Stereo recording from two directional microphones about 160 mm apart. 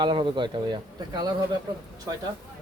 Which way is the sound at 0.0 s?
30° right (ahead or behind).